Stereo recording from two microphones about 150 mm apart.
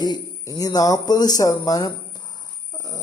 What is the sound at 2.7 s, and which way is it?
Chicken, 20° left (ahead or behind).